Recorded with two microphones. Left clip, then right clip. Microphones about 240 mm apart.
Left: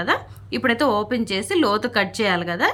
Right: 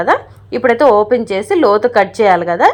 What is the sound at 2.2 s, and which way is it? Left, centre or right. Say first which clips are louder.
Speech: right 13 dB; left.